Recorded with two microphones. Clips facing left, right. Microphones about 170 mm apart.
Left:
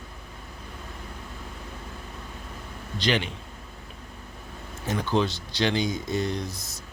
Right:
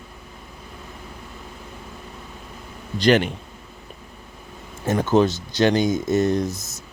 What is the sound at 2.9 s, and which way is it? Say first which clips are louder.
Speech: right 9 dB; 45° right (ahead or behind).